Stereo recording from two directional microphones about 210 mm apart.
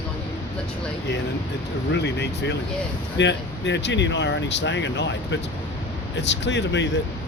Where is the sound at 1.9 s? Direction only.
55° left (ahead or behind).